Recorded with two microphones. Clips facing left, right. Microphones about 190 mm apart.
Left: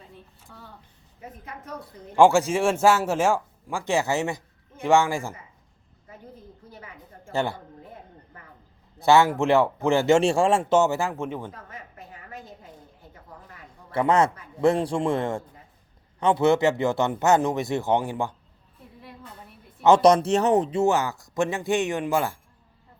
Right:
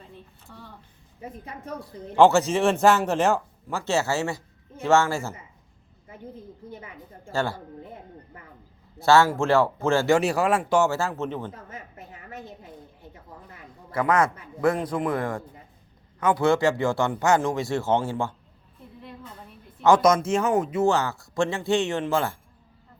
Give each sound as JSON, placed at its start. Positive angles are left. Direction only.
{"t": 0.4, "sound": "speech", "side_deg": 0}
{"t": 2.1, "sound": "speech", "side_deg": 10}
{"t": 7.3, "sound": "speech", "side_deg": 20}
{"t": 9.0, "sound": "speech", "side_deg": 20}
{"t": 11.5, "sound": "a sound", "side_deg": -25}
{"t": 13.9, "sound": "speech", "side_deg": 25}
{"t": 20.0, "sound": "speech", "side_deg": 35}
{"t": 20.8, "sound": "speech", "side_deg": 15}